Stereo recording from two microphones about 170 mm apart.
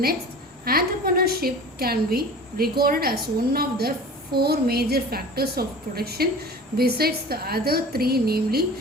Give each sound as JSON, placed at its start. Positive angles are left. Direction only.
{"t": 0.6, "sound": "a woman's voice", "side_deg": -60}